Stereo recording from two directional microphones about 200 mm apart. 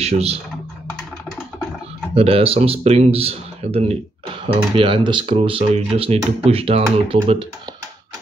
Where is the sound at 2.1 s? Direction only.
30° right (ahead or behind).